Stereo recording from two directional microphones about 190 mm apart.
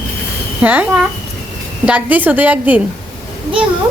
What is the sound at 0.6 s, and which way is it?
Speech, 10° right (ahead or behind).